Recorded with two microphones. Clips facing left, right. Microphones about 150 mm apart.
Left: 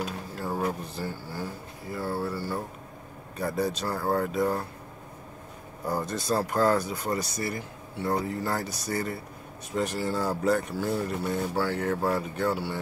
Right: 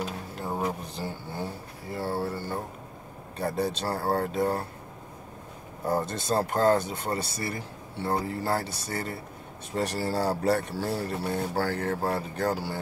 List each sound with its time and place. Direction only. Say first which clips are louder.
0.4 s a sound: left 1 dB; 20° right (ahead or behind)
3.3 s speech: even; 30° right (ahead or behind)
6.0 s speech: even; 25° right (ahead or behind)